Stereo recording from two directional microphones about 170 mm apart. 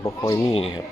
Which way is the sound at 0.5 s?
30° left (ahead or behind).